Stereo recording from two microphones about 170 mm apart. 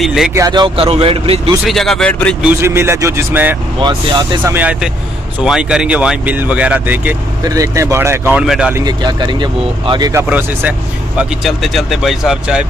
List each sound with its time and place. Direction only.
0.0 s speech: centre (ahead or behind)
0.3 s speech: 20° right (ahead or behind)
1.6 s speech: centre (ahead or behind)
2.4 s speech: 15° right (ahead or behind)
3.8 s speech: 25° right (ahead or behind)
4.4 s speech: 10° right (ahead or behind)
7.4 s speech: 20° right (ahead or behind)
8.7 s speech: 25° right (ahead or behind)
11.1 s speech: centre (ahead or behind)